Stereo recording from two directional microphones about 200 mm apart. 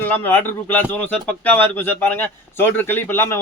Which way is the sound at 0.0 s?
10° left (ahead or behind).